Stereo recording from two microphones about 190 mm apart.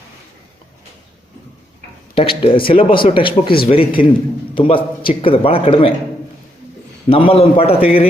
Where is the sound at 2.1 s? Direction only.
30° left (ahead or behind).